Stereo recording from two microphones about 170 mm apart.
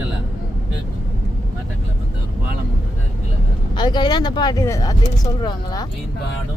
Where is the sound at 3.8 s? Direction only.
25° left (ahead or behind).